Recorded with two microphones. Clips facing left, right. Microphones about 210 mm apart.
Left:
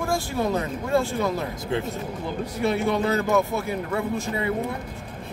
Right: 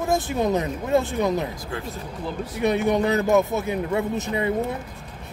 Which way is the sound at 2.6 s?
20° right (ahead or behind).